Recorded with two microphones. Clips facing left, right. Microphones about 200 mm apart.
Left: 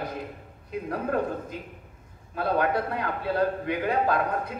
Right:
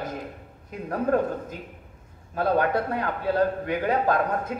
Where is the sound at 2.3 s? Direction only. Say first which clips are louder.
Right 2 dB; 45° right (ahead or behind).